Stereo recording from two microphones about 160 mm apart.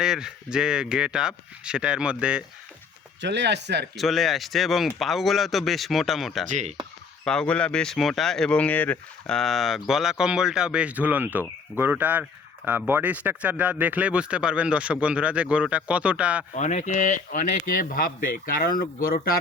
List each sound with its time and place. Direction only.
0.0 s speech: 5° right (ahead or behind)
3.2 s speech: 90° right
3.9 s speech: centre (ahead or behind)
6.5 s speech: 50° right (ahead or behind)
7.3 s speech: 5° left (ahead or behind)
16.6 s speech: 45° left (ahead or behind); by 19.4 s 65° left (ahead or behind)